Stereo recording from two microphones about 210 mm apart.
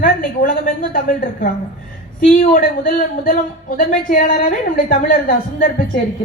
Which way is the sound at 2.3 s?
40° left (ahead or behind).